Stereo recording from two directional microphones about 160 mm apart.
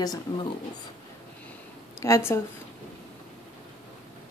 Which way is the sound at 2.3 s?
20° left (ahead or behind).